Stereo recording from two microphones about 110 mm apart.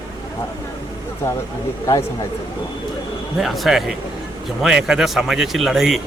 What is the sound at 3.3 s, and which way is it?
A man's voice, centre (ahead or behind).